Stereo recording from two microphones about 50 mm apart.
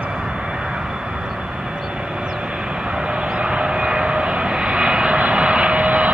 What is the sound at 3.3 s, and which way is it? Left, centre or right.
Vehicle, centre.